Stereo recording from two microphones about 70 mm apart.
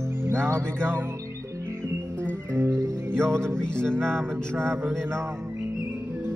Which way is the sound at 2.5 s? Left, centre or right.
Right.